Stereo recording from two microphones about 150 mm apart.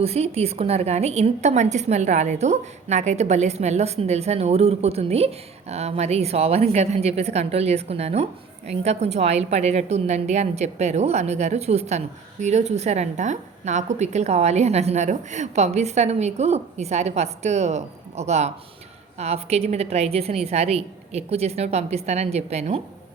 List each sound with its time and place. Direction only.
0.0 s a woman's voice: 45° right (ahead or behind)